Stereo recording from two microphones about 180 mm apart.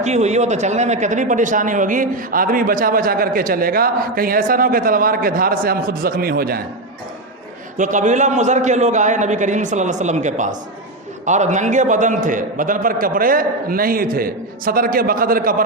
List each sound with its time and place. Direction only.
0.0 s speech: 40° right (ahead or behind); by 6.6 s 55° right (ahead or behind)
7.8 s speech: 45° right (ahead or behind)